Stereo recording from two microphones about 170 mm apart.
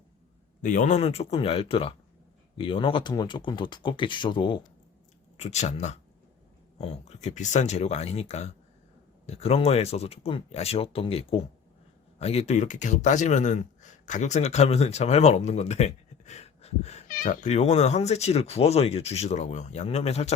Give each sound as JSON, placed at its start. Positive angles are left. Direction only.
{"t": 0.6, "sound": "speech", "side_deg": 55}
{"t": 5.4, "sound": "speech", "side_deg": 40}